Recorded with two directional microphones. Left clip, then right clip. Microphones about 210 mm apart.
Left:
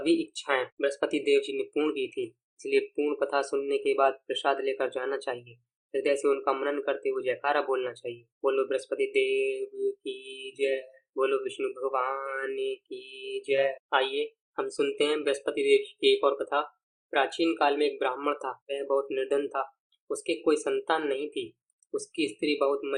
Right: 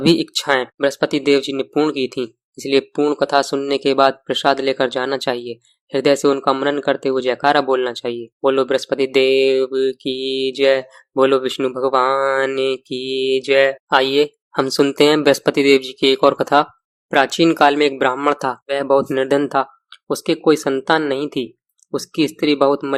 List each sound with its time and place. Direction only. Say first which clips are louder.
0.0 s speech: right 11 dB; 40° right (ahead or behind)